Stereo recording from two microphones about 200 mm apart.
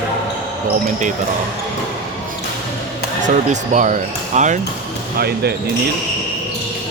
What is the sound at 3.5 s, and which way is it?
Speech, 35° right (ahead or behind).